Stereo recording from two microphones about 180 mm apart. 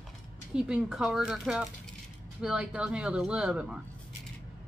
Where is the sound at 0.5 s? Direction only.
5° right (ahead or behind).